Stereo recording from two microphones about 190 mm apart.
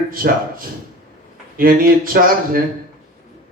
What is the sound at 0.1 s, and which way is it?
Speech, 50° right (ahead or behind).